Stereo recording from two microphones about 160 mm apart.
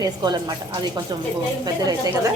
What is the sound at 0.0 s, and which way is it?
Speech, 25° right (ahead or behind).